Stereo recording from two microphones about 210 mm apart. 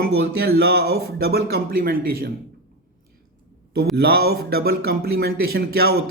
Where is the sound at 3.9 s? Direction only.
45° right (ahead or behind).